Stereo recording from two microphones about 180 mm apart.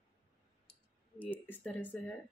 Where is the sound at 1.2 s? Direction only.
10° left (ahead or behind).